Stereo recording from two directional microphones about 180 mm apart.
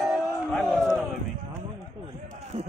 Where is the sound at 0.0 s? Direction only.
Centre (ahead or behind).